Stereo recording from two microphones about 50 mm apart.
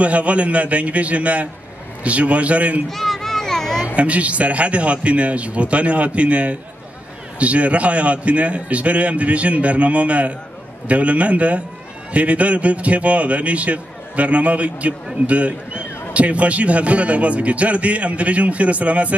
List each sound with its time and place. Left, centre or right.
0.0 s a man's voice: right
2.9 s a sound: centre
3.8 s a man's voice: right